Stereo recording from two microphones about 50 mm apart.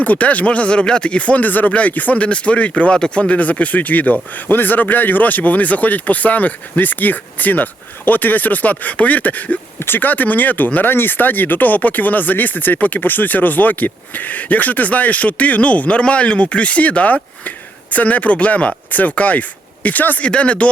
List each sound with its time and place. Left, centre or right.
0.0 s speech: left
20.2 s speech: left